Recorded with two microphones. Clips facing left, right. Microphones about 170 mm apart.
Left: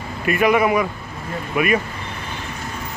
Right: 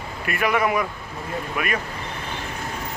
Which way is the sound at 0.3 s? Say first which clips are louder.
Left 6 dB; 20° left (ahead or behind).